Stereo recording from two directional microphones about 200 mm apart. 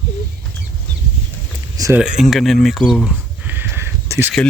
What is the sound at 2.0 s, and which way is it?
Speech, 5° right (ahead or behind).